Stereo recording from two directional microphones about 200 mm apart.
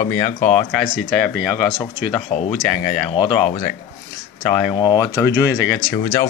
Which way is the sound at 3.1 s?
25° left (ahead or behind).